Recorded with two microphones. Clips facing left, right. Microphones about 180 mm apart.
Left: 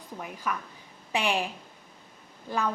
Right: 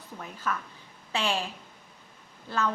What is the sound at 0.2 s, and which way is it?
Speech, 15° left (ahead or behind).